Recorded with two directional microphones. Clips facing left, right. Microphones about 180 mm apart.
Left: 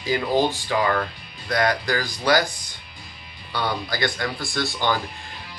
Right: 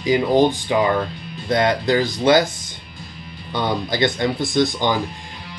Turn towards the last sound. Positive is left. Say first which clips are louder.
# right 6 dB
turn(degrees=-15)  # may be behind; listen again after turning